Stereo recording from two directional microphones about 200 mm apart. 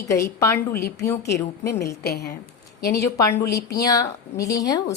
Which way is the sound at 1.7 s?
50° left (ahead or behind).